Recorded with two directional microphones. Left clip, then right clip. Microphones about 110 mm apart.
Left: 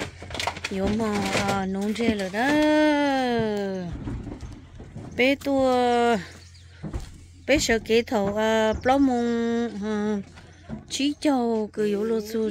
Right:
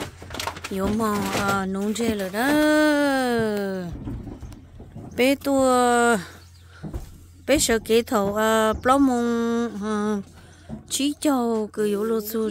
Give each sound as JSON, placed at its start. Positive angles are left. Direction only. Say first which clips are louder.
{"t": 0.7, "sound": "speech", "louder": "right 4 dB", "side_deg": -25}
{"t": 5.1, "sound": "speech", "louder": "right 1 dB", "side_deg": -35}
{"t": 6.8, "sound": "a sound", "louder": "even", "side_deg": -50}
{"t": 7.4, "sound": "speech", "louder": "right 1 dB", "side_deg": -30}